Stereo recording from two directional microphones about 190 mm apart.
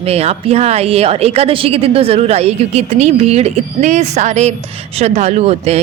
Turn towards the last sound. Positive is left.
turn(degrees=-35)  # may be behind; listen again after turning